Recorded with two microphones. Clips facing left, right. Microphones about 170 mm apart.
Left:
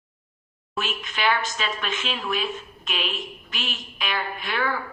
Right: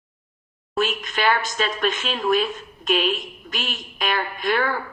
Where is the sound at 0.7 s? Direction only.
45° right (ahead or behind).